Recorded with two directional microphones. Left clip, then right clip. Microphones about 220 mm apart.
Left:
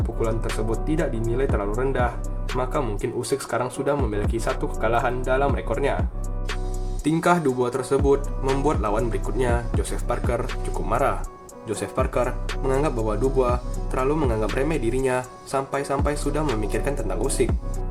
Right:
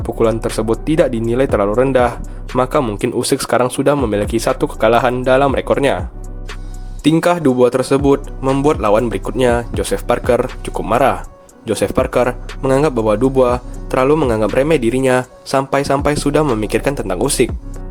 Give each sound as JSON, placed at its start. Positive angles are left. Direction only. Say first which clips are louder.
{"t": 0.5, "sound": "speech", "louder": "right 11 dB", "side_deg": -45}
{"t": 7.0, "sound": "speech", "louder": "right 7 dB", "side_deg": -40}